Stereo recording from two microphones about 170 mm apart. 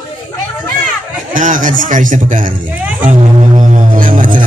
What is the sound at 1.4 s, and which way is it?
Speech, 50° right (ahead or behind).